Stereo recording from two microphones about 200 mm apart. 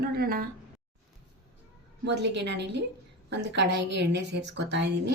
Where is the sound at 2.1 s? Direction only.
60° right (ahead or behind).